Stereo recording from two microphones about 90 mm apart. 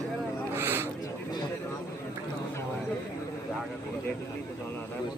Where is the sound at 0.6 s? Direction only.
25° right (ahead or behind).